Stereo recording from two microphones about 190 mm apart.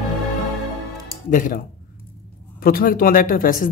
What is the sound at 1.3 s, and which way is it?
Speech, 45° left (ahead or behind).